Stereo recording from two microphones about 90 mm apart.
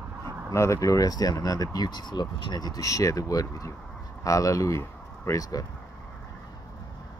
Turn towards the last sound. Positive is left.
turn(degrees=35)  # may be behind; listen again after turning